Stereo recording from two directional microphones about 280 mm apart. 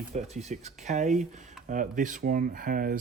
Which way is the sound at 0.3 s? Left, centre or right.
Right.